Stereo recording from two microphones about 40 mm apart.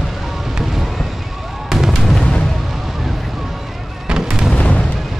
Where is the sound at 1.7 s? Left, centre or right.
Centre.